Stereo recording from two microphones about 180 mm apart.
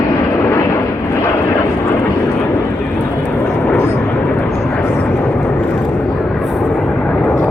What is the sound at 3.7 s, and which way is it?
Vehicle, 15° left (ahead or behind).